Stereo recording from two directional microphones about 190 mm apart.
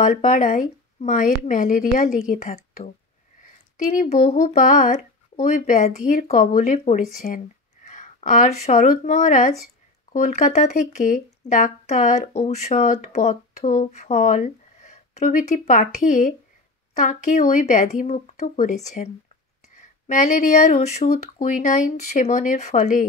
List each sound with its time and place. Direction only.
0.0 s speech: 40° left (ahead or behind)
20.1 s speech: 40° left (ahead or behind)